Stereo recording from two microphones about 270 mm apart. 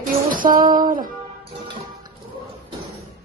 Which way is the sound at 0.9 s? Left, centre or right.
Right.